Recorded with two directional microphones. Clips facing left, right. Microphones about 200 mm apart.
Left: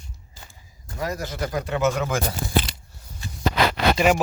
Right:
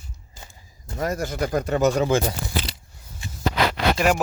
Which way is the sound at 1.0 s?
50° right (ahead or behind).